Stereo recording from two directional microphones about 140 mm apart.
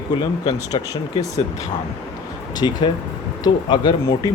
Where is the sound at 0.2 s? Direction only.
30° left (ahead or behind).